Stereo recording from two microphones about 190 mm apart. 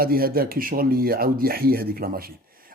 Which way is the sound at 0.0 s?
50° right (ahead or behind).